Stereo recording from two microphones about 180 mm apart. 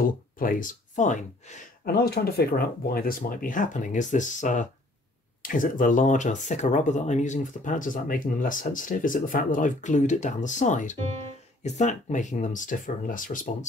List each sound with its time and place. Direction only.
0.4 s speech: 50° left (ahead or behind)